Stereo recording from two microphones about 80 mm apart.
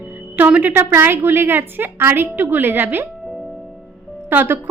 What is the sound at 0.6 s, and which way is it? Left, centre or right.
A woman's voice, right.